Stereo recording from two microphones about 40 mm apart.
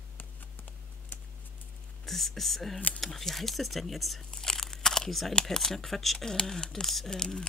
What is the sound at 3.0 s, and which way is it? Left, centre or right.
Speech, centre.